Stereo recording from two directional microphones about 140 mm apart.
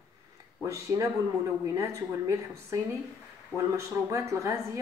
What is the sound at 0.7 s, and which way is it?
A woman's voice, 20° right (ahead or behind).